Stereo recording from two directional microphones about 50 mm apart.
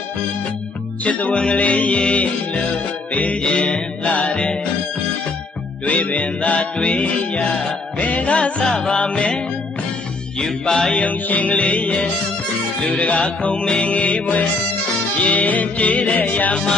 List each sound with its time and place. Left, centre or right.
1.0 s music: left
5.8 s music: left
8.6 s music: centre
10.9 s music: left